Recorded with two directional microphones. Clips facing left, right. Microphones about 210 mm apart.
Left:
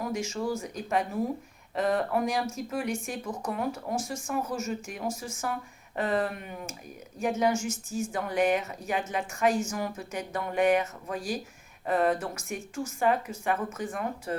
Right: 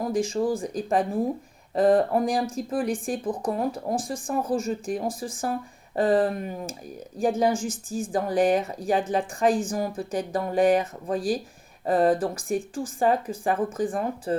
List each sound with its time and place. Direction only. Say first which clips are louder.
0.0 s a woman's voice: right 6 dB; 30° right (ahead or behind)